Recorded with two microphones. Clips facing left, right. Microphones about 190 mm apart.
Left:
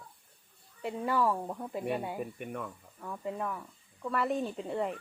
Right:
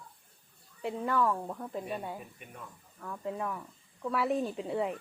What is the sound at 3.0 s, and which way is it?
Speech, 5° left (ahead or behind).